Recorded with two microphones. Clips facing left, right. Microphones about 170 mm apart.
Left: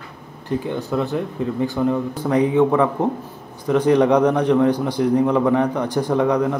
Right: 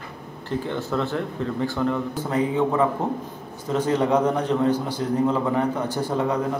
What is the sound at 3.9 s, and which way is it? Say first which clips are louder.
A man's voice: left 4 dB; 70° left (ahead or behind).